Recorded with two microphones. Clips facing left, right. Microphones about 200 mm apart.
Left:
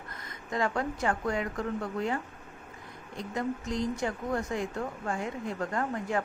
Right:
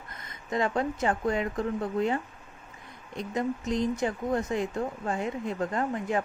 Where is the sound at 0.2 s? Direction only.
20° right (ahead or behind).